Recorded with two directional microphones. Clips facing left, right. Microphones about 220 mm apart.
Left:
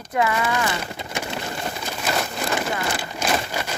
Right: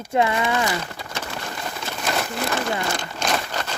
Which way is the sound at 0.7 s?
20° left (ahead or behind).